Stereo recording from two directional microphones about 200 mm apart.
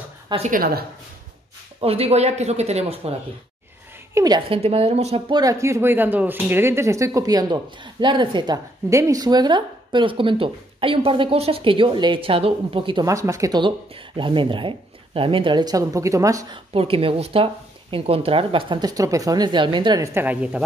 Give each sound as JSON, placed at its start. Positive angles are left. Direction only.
{"t": 0.5, "sound": "a woman's voice", "side_deg": -45}
{"t": 1.8, "sound": "speech", "side_deg": -30}
{"t": 4.1, "sound": "speech", "side_deg": -20}
{"t": 4.6, "sound": "speech", "side_deg": -30}
{"t": 16.7, "sound": "speech", "side_deg": -30}